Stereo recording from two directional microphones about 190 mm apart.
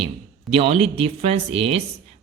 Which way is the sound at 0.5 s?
30° right (ahead or behind).